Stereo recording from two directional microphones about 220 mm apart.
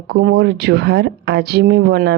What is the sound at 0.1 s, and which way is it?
Speech, 50° right (ahead or behind).